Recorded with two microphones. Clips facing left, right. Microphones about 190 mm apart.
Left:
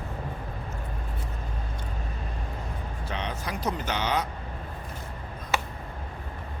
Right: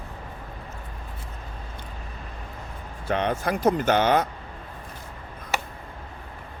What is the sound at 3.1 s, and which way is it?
Speech, 55° right (ahead or behind).